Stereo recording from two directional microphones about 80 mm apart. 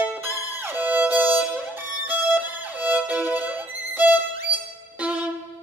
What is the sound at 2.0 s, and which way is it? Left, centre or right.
Violin, right.